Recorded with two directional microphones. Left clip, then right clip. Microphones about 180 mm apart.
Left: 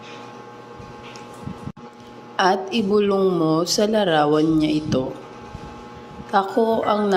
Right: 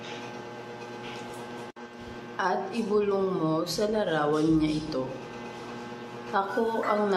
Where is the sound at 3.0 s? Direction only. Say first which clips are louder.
Left 7 dB; 45° left (ahead or behind).